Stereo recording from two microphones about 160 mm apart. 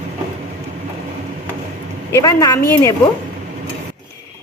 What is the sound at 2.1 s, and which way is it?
Speech, 20° left (ahead or behind).